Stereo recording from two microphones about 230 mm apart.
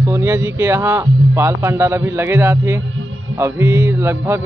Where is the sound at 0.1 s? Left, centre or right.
Centre.